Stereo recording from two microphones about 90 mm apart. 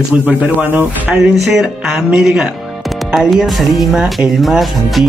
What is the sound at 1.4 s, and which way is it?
Speech, 10° right (ahead or behind).